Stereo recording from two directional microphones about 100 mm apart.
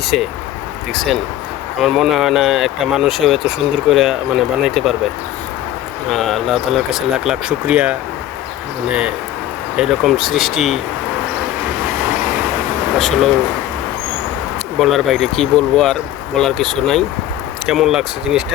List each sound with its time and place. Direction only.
1.8 s speech: 5° right (ahead or behind)
6.1 s speech: 5° left (ahead or behind)
13.0 s speech: centre (ahead or behind)
14.8 s speech: centre (ahead or behind)